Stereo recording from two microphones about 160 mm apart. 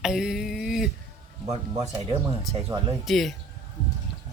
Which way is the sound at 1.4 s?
35° right (ahead or behind).